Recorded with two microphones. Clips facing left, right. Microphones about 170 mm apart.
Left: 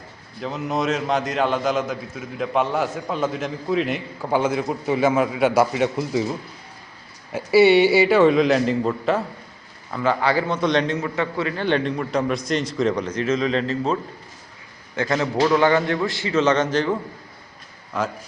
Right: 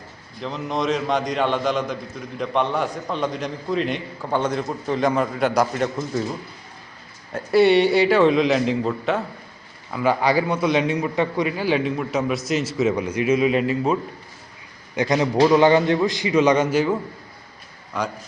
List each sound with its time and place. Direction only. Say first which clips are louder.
0.4 s a man's voice: even; 5° left (ahead or behind)
7.3 s a man's voice: left 1 dB; 5° left (ahead or behind)
9.9 s a man's voice: right 1 dB; 10° right (ahead or behind)
17.9 s a man's voice: left 1 dB; centre (ahead or behind)